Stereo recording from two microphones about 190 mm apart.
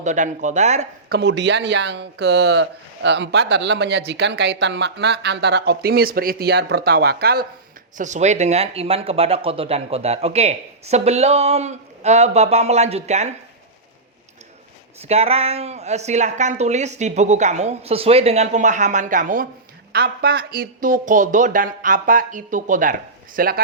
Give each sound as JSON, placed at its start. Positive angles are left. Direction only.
{"t": 0.0, "sound": "speech", "side_deg": -40}
{"t": 1.1, "sound": "speech", "side_deg": -65}
{"t": 7.9, "sound": "speech", "side_deg": -40}
{"t": 15.0, "sound": "speech", "side_deg": -35}
{"t": 19.9, "sound": "speech", "side_deg": -55}